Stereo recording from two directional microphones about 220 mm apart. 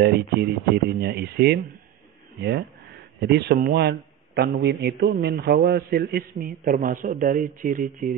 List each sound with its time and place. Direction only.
0.0 s a man's voice: 45° right (ahead or behind)
3.2 s a man's voice: 50° right (ahead or behind)